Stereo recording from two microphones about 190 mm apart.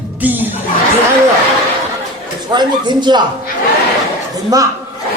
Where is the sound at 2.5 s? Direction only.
25° right (ahead or behind).